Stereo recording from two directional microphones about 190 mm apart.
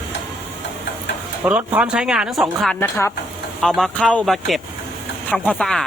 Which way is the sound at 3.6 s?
Centre (ahead or behind).